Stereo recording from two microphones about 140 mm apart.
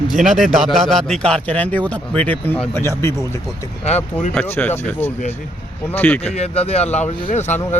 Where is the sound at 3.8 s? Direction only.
50° left (ahead or behind).